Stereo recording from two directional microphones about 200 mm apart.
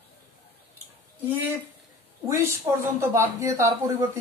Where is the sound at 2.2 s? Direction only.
15° right (ahead or behind).